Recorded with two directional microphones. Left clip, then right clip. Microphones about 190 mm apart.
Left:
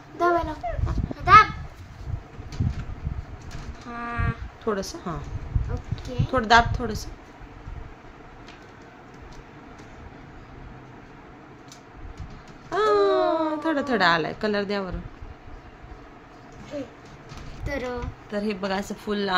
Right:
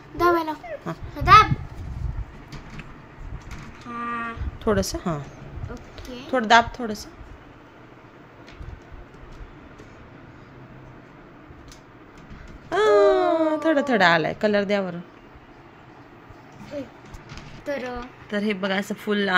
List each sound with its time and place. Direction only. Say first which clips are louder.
0.2 s a sound: right 2 dB; 60° right (ahead or behind)
1.2 s children playing: right 1 dB; 50° right (ahead or behind)
3.9 s music: right 2 dB; 40° right (ahead or behind)
6.3 s a woman's voice: right 1 dB; 15° right (ahead or behind)
12.6 s a sound: right 4 dB; 25° right (ahead or behind)
17.6 s a woman's voice: right 1 dB; 15° right (ahead or behind)